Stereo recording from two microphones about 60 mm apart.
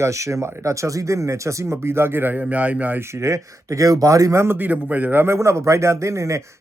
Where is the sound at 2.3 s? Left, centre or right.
Right.